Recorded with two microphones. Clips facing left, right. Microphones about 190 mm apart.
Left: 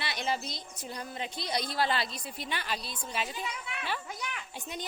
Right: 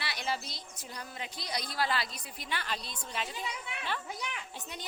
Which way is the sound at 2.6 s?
10° left (ahead or behind).